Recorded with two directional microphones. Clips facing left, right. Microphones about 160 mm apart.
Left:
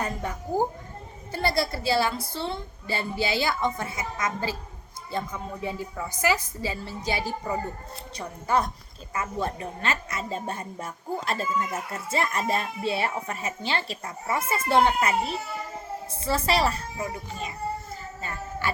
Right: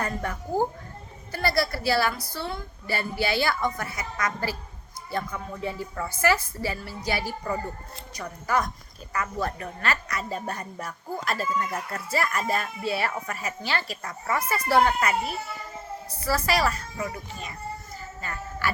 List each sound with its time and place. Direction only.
0.0 s a woman's voice: 15° left (ahead or behind)